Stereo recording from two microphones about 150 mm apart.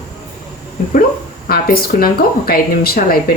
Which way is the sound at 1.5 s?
85° left.